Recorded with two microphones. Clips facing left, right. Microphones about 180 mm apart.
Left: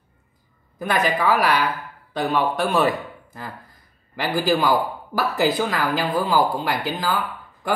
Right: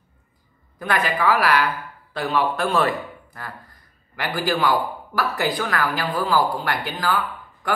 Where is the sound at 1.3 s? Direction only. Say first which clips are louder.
Even; 10° left (ahead or behind).